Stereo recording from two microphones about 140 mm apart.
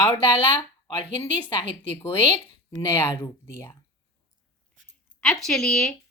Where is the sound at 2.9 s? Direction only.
20° left (ahead or behind).